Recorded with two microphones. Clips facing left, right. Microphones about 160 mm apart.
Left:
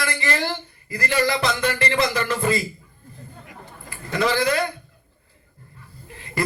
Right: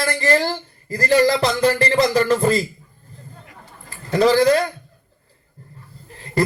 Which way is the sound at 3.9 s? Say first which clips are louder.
Right 7 dB; 35° right (ahead or behind).